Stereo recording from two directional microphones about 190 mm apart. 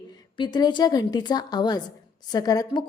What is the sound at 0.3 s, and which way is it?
A woman's voice, 20° left (ahead or behind).